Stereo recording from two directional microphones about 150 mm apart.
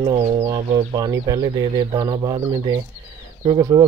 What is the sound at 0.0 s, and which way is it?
Speech, 35° right (ahead or behind).